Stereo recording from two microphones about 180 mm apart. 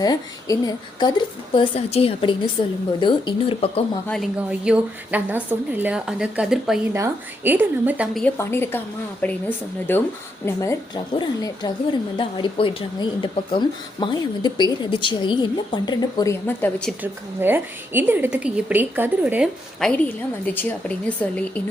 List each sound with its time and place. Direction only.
0.0 s a woman's voice: 20° left (ahead or behind)
4.0 s a woman's voice: 5° left (ahead or behind)
8.2 s a woman's voice: 15° left (ahead or behind)
17.0 s a woman's voice: 10° right (ahead or behind)
20.4 s a woman's voice: 10° left (ahead or behind)